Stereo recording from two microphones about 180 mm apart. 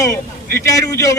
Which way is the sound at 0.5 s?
15° left (ahead or behind).